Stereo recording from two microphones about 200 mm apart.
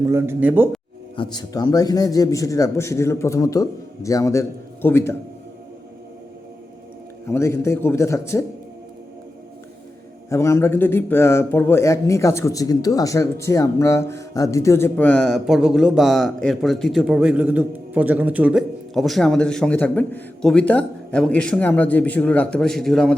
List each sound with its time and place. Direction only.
0.0 s speech: 15° right (ahead or behind)
1.1 s a man's voice: 25° left (ahead or behind)
7.3 s a man's voice: 15° left (ahead or behind)
10.2 s a man's voice: 15° left (ahead or behind)